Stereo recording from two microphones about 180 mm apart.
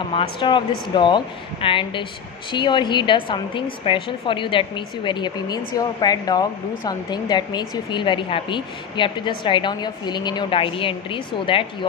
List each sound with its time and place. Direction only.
0.0 s speech: 30° left (ahead or behind)